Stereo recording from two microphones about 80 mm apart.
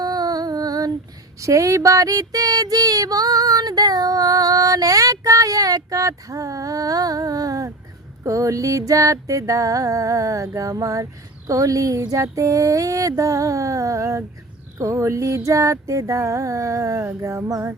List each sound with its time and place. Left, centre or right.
0.0 s music: right
1.4 s a sound: right
14.8 s music: right